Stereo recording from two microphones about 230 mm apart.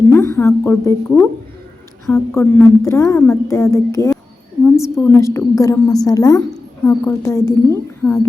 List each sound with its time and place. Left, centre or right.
0.1 s a woman's voice: centre